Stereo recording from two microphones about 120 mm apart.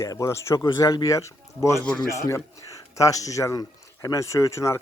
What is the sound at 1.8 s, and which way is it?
Speech, 10° left (ahead or behind).